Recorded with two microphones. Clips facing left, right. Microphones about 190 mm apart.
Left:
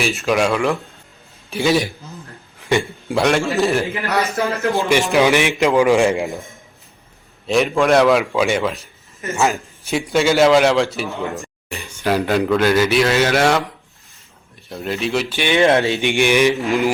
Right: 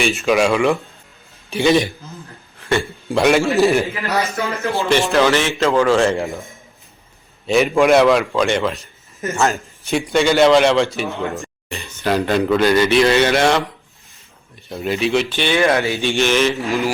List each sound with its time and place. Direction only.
0.0 s a man's voice: centre (ahead or behind)
2.6 s a sound: 15° left (ahead or behind)
3.2 s a man's voice: centre (ahead or behind)
4.7 s speech: 15° left (ahead or behind)
7.4 s a man's voice: centre (ahead or behind)
9.3 s speech: 15° left (ahead or behind)
9.9 s a man's voice: 5° left (ahead or behind)
11.7 s a man's voice: 10° left (ahead or behind)
14.7 s speech: centre (ahead or behind); by 16.9 s 15° left (ahead or behind)